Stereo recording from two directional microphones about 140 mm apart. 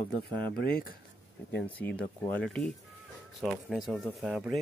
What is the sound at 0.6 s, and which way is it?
Speech, 90° left.